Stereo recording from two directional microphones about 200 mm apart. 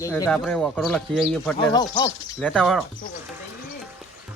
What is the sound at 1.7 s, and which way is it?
Speech, 20° left (ahead or behind).